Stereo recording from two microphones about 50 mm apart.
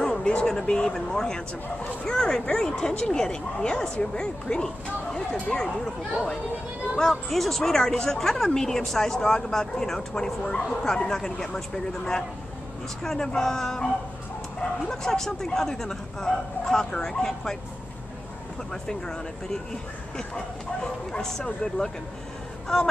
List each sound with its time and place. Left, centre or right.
0.0 s speech: centre
7.0 s speech: centre
18.7 s speech: centre